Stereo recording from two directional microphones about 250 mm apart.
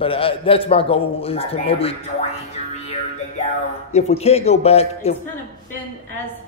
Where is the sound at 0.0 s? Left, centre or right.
Left.